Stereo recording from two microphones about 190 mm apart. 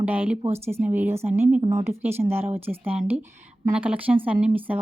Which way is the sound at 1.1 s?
35° right (ahead or behind).